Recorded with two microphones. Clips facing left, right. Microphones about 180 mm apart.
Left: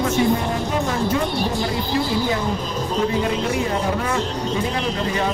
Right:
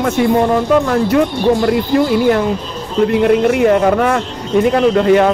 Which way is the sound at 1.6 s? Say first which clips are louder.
Right 9 dB; 70° right (ahead or behind).